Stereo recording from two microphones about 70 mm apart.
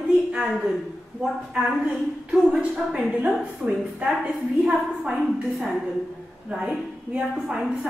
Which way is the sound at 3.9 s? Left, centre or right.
Centre.